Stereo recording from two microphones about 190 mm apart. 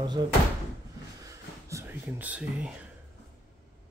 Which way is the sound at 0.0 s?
25° right (ahead or behind).